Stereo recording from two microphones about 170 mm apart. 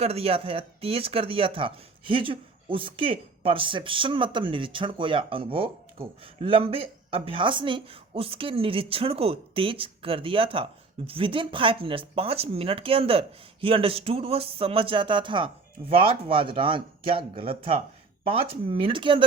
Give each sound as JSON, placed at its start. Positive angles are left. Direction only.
{"t": 0.0, "sound": "speech", "side_deg": -35}